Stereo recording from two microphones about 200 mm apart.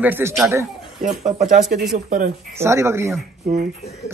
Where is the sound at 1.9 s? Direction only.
40° right (ahead or behind).